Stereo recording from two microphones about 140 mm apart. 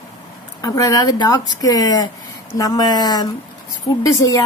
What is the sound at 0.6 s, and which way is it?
Speech, 25° left (ahead or behind).